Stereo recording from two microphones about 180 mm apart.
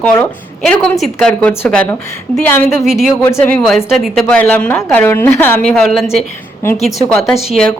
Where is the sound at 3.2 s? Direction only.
10° left (ahead or behind).